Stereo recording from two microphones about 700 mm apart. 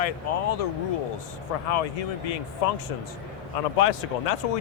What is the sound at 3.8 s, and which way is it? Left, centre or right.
Speech, left.